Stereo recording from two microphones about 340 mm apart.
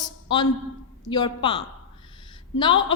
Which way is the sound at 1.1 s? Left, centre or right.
Centre.